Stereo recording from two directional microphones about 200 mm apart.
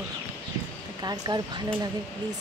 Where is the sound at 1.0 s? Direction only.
20° right (ahead or behind).